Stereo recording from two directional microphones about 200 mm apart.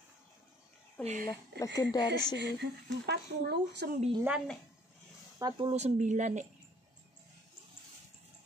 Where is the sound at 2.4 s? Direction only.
55° right (ahead or behind).